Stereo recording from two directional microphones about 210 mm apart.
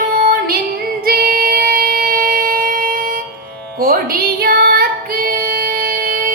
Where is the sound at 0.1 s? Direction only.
45° right (ahead or behind).